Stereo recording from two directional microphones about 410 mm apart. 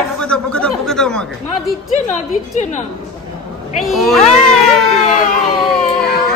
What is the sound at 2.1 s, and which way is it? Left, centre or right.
Speech, centre.